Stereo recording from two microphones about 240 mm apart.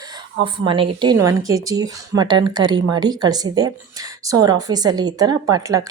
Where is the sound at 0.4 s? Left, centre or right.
Centre.